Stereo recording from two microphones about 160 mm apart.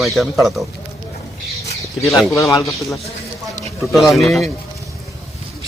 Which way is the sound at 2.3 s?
20° left (ahead or behind).